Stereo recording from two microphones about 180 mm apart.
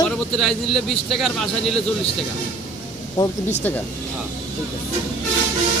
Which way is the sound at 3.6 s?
10° left (ahead or behind).